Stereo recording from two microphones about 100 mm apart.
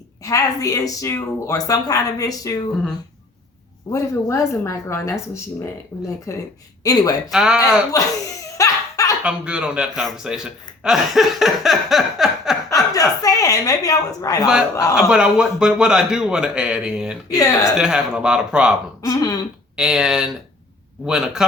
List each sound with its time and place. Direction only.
0.2 s a woman's voice: 35° left (ahead or behind)
3.9 s a woman's voice: 30° left (ahead or behind)
7.3 s a man's voice: 5° right (ahead or behind)
8.5 s laughter: 35° left (ahead or behind)
9.2 s a man's voice: 10° right (ahead or behind)
12.9 s a sound: 35° left (ahead or behind)
14.9 s a man's voice: 5° right (ahead or behind)
17.3 s a woman's voice: 35° left (ahead or behind)
17.7 s a man's voice: 5° right (ahead or behind)
19.0 s a woman's voice: 40° left (ahead or behind)
19.7 s a man's voice: 5° right (ahead or behind)